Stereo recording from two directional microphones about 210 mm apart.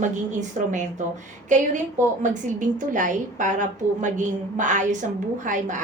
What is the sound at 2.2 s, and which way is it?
A woman's voice, 40° right (ahead or behind).